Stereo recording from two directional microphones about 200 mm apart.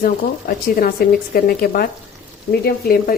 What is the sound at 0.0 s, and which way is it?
Speech, 45° left (ahead or behind).